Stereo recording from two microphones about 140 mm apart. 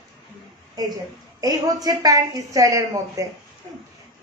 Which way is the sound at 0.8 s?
25° right (ahead or behind).